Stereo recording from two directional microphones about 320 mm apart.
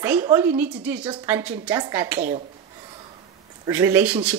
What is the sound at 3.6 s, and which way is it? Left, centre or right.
Speech, centre.